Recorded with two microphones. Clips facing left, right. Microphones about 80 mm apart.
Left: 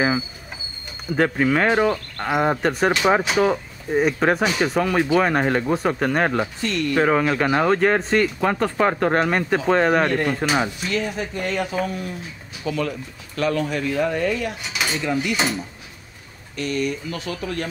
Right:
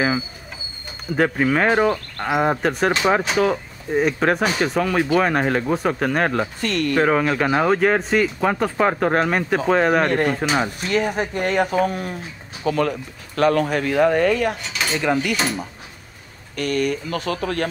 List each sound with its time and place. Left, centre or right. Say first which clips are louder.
1.1 s speech: even; centre
6.6 s speech: right 2 dB; right
7.0 s speech: even; centre
10.8 s speech: right 4 dB; right
14.7 s cutlery: right 1 dB; centre
15.0 s speech: right 4 dB; right
16.5 s speech: right 3 dB; right